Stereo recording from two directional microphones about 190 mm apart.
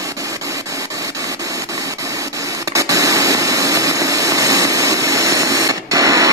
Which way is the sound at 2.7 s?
15° right (ahead or behind).